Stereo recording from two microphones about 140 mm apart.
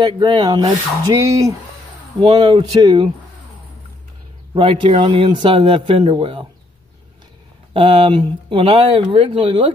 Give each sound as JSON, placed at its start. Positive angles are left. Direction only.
{"t": 0.0, "sound": "speech", "side_deg": -35}
{"t": 2.2, "sound": "speech", "side_deg": -50}
{"t": 2.5, "sound": "speech", "side_deg": -35}
{"t": 4.6, "sound": "speech", "side_deg": -40}
{"t": 7.7, "sound": "speech", "side_deg": -40}